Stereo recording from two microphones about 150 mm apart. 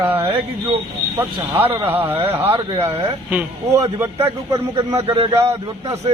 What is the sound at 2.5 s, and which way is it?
Speech, 40° right (ahead or behind).